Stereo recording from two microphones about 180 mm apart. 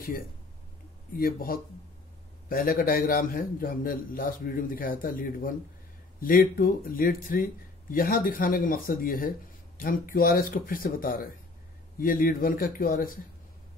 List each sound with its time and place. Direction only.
1.1 s speech: 55° left (ahead or behind)